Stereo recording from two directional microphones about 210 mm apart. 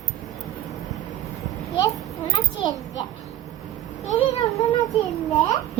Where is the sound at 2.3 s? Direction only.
20° left (ahead or behind).